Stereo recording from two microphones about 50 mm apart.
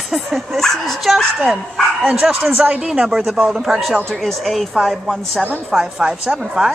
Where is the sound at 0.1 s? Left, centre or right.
Centre.